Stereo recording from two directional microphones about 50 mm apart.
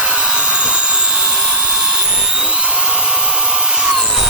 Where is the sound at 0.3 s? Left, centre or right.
Right.